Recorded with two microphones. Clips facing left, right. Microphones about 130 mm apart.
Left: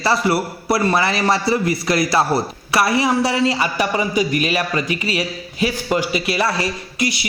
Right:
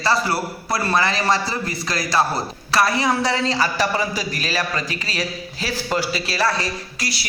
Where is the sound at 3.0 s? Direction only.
15° left (ahead or behind).